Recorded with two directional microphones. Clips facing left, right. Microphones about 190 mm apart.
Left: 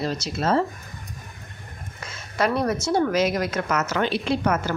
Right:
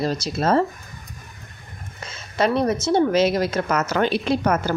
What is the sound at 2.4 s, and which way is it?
Speech, 20° right (ahead or behind).